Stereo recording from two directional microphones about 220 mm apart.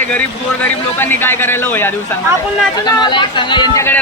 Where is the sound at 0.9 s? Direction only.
10° left (ahead or behind).